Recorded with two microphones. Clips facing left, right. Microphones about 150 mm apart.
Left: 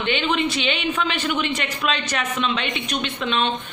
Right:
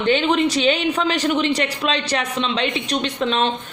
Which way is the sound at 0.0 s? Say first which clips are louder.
Right 5 dB; 35° right (ahead or behind).